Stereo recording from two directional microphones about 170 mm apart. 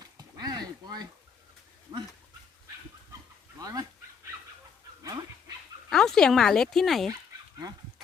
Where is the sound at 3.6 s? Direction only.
20° right (ahead or behind).